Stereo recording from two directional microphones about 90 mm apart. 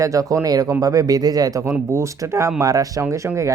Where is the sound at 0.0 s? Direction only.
40° right (ahead or behind).